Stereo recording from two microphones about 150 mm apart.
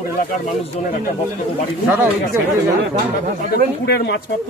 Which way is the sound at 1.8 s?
10° right (ahead or behind).